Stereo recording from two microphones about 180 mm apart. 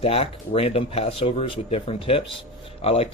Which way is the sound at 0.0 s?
35° left (ahead or behind).